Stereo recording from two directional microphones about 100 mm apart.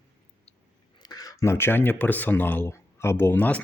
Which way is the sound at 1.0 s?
40° left (ahead or behind).